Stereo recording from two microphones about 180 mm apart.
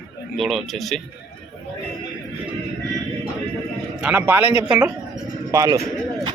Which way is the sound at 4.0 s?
10° right (ahead or behind).